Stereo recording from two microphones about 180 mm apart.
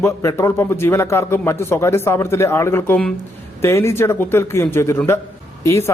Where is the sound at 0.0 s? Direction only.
15° left (ahead or behind).